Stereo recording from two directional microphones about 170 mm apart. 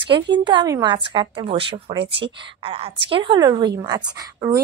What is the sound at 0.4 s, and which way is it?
A woman's voice, 25° right (ahead or behind).